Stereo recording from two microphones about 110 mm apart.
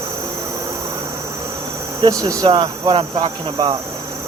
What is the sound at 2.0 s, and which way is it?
Insect, 35° right (ahead or behind).